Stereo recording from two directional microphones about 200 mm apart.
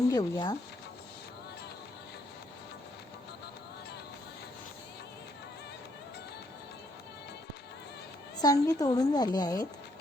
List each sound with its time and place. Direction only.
0.1 s a woman's voice: 20° left (ahead or behind)
8.4 s a woman's voice: 20° left (ahead or behind)